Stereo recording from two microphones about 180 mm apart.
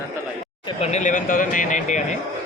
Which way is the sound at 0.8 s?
40° left (ahead or behind).